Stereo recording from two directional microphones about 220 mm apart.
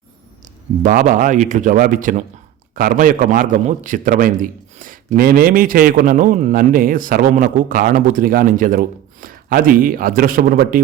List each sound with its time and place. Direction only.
0.4 s a man's voice: 35° right (ahead or behind)